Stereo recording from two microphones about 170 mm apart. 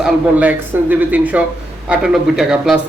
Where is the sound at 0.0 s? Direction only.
10° right (ahead or behind).